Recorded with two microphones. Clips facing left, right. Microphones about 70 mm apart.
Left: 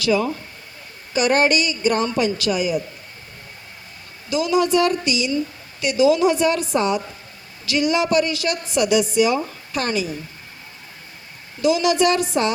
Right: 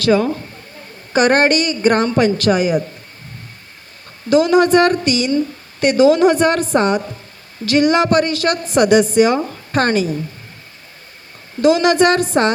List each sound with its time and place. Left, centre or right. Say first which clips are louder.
1.1 s a woman's voice: right 4 dB; right
4.3 s a woman's voice: right 7 dB; right
11.6 s a woman's voice: right 5 dB; right